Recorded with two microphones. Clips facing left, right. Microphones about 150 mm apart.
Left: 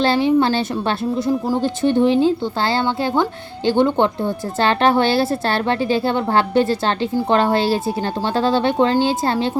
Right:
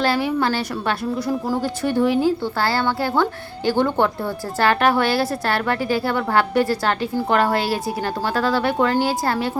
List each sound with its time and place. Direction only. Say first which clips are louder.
0.0 s a woman's voice: left 4 dB; 25° left (ahead or behind)